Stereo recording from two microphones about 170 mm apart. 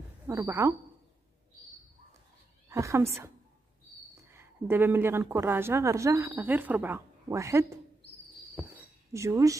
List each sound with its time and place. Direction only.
0.3 s a woman's voice: 15° right (ahead or behind)
2.7 s a woman's voice: 15° right (ahead or behind)
4.3 s a woman's voice: 15° right (ahead or behind)
9.1 s a woman's voice: 15° right (ahead or behind)